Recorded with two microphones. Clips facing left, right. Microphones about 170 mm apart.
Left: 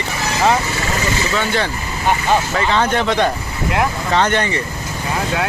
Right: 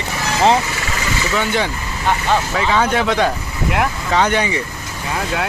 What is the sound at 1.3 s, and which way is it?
Speech, 10° right (ahead or behind).